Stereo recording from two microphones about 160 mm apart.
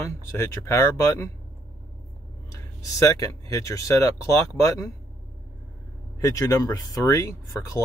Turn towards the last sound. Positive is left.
turn(degrees=20)  # may be behind; listen again after turning